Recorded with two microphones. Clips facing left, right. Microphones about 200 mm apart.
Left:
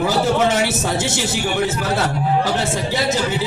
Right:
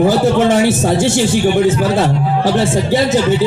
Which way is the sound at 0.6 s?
50° right (ahead or behind).